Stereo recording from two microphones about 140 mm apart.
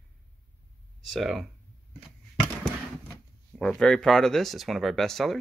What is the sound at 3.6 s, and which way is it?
Speech, 5° left (ahead or behind).